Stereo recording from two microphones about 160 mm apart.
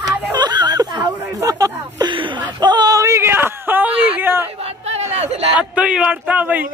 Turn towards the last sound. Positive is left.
turn(degrees=-10)  # may be behind; listen again after turning